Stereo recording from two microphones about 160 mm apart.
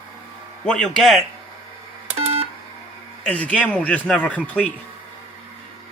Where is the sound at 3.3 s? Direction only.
10° left (ahead or behind).